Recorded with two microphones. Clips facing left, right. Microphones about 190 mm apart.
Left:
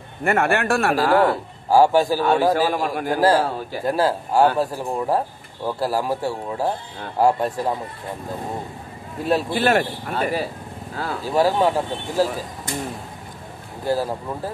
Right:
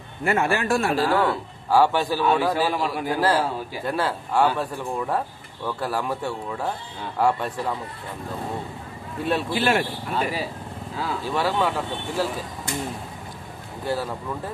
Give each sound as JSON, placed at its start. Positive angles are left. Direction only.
{"t": 0.2, "sound": "a man's voice", "side_deg": 60}
{"t": 0.9, "sound": "a man's voice", "side_deg": 45}
{"t": 9.2, "sound": "a man's voice", "side_deg": 40}
{"t": 13.8, "sound": "a man's voice", "side_deg": 40}